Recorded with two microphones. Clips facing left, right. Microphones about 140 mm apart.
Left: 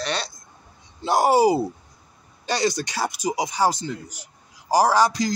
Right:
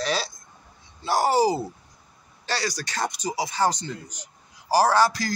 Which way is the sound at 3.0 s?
10° left (ahead or behind).